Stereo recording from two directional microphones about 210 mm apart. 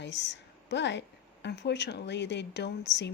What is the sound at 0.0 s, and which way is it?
Speech, 55° left (ahead or behind).